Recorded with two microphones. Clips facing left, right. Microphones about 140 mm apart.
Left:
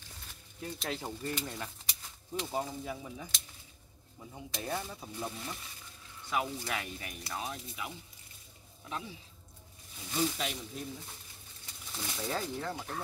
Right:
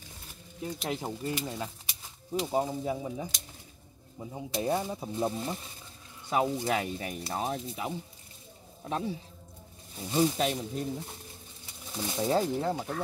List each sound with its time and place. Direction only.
0.8 s speech: 15° right (ahead or behind); by 7.6 s 35° right (ahead or behind)
8.8 s a man's voice: 40° right (ahead or behind)
11.9 s speech: 20° right (ahead or behind)